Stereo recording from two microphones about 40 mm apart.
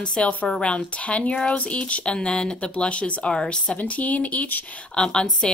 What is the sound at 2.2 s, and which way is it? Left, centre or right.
Speech, left.